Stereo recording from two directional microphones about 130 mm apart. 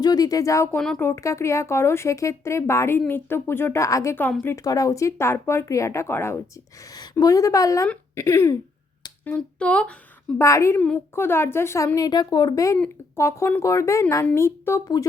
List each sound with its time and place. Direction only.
0.0 s a woman's voice: 30° left (ahead or behind)
0.8 s speech: 5° left (ahead or behind)
1.0 s a woman's voice: 25° left (ahead or behind)
6.9 s a woman's voice: 30° left (ahead or behind)
9.2 s speech: 10° left (ahead or behind)
10.3 s a woman's voice: 25° left (ahead or behind)